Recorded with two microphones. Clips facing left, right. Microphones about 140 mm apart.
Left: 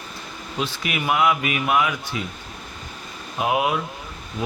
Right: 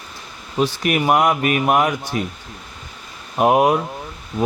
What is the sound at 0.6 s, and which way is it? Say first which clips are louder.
A man's voice: right 8 dB; 45° right (ahead or behind).